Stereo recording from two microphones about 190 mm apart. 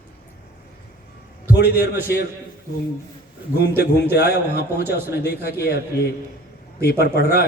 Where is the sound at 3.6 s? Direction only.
55° left (ahead or behind).